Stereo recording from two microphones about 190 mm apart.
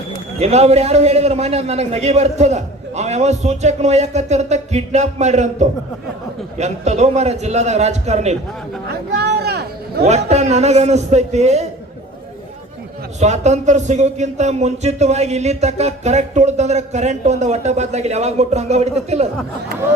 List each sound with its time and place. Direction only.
0.3 s speech: 35° right (ahead or behind)
9.1 s speech: 60° right (ahead or behind)
10.1 s speech: 35° right (ahead or behind)
13.1 s speech: 35° right (ahead or behind)